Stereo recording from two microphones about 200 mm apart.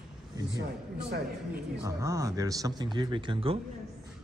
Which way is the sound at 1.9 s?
15° right (ahead or behind).